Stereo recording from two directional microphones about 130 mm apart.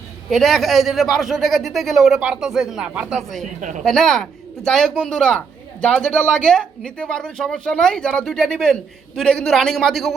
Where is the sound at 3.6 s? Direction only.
70° right (ahead or behind).